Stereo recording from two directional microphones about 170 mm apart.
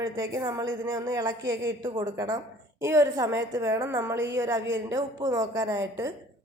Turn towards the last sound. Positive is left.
turn(degrees=-15)  # may be behind; listen again after turning